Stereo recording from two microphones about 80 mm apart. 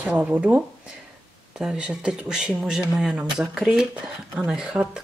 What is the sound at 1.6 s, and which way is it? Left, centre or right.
Speech, centre.